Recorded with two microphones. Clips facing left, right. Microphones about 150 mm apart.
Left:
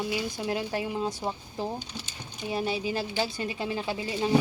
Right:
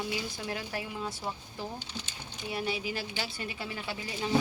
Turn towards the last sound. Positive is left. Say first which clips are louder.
# left 6 dB
turn(degrees=25)  # may be behind; listen again after turning